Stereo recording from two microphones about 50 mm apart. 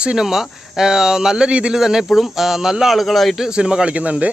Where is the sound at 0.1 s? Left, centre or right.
Centre.